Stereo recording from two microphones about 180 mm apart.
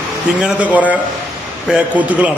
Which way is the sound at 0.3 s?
5° right (ahead or behind).